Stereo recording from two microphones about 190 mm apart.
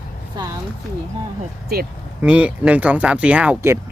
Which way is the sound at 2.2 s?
5° right (ahead or behind).